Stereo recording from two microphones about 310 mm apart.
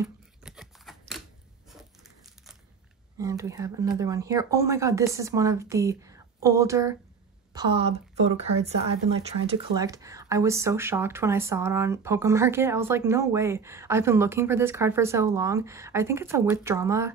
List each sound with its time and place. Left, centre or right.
0.0 s scissors: centre
1.7 s crumpling: centre
3.2 s a woman's voice: centre